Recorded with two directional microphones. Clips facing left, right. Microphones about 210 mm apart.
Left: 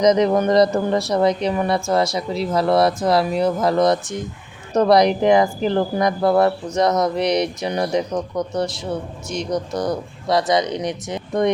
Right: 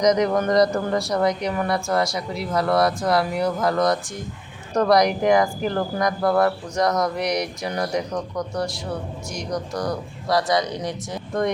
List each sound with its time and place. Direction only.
0.0 s speech: 25° left (ahead or behind)